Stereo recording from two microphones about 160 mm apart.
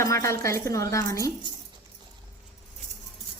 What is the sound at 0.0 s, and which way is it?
Speech, 20° left (ahead or behind).